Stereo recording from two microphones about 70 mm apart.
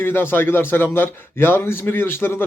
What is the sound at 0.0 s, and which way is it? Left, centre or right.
A man's voice, left.